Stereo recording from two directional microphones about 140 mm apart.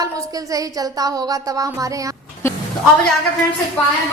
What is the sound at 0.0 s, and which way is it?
Music, 25° right (ahead or behind).